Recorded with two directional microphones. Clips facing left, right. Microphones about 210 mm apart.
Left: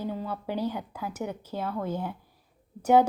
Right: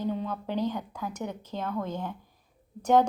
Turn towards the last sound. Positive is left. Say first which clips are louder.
# left 2 dB
turn(degrees=10)  # may be behind; listen again after turning